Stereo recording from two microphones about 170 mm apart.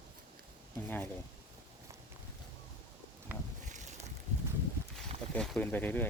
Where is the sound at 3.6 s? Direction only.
45° right (ahead or behind).